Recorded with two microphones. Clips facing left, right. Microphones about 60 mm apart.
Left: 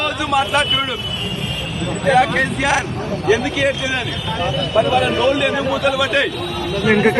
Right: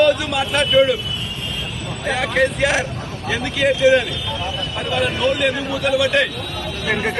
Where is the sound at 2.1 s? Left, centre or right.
Centre.